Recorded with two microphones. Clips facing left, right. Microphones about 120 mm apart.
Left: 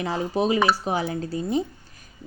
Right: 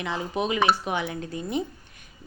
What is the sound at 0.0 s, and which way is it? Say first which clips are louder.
A woman's voice: left 4 dB; 35° left (ahead or behind).